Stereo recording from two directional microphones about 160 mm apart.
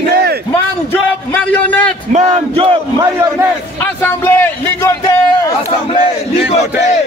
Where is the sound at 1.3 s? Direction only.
10° left (ahead or behind).